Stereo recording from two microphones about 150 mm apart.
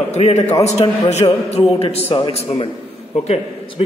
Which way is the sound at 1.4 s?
45° left (ahead or behind).